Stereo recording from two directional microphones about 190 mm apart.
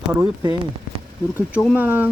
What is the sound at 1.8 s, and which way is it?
Speech, 10° right (ahead or behind).